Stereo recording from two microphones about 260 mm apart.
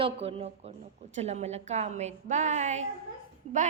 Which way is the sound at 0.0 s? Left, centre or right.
Right.